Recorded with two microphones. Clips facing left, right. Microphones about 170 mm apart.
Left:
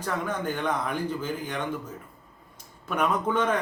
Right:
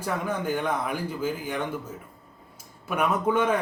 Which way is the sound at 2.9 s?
10° right (ahead or behind).